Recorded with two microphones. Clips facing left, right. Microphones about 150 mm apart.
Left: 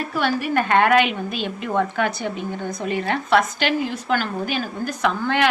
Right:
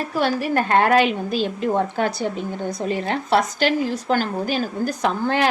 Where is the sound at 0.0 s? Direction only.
35° right (ahead or behind).